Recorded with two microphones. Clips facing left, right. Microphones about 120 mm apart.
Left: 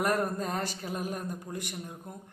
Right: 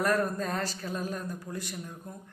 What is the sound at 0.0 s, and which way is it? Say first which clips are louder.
A woman's voice: right 1 dB; 20° left (ahead or behind).